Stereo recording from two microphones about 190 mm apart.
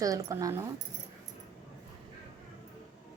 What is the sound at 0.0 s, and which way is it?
Speech, 20° right (ahead or behind).